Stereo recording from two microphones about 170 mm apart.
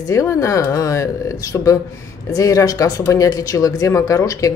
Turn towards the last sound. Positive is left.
turn(degrees=20)  # may be behind; listen again after turning